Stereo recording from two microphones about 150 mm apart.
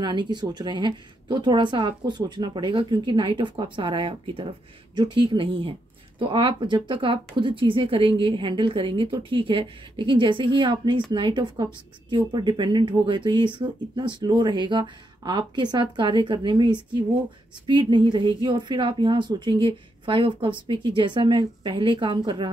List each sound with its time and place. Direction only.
0.0 s a woman's voice: 30° right (ahead or behind)